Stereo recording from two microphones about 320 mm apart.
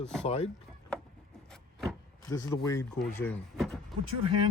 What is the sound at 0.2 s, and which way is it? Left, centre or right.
Speech, centre.